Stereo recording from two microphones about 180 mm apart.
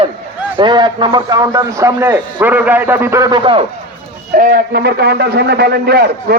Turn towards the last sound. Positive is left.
turn(degrees=-60)  # may be behind; listen again after turning